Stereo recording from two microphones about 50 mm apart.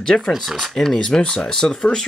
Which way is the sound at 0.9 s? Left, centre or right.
Centre.